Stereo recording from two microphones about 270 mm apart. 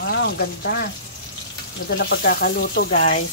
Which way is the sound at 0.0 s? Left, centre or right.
Left.